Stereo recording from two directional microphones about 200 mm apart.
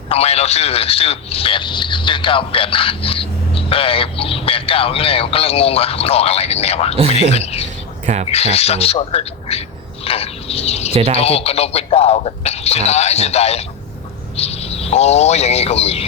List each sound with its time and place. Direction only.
0.1 s a man's voice: 30° left (ahead or behind)
8.0 s speech: 40° right (ahead or behind)
8.3 s speech: 30° left (ahead or behind)